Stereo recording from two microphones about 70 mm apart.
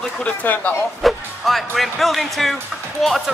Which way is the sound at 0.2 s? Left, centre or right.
Left.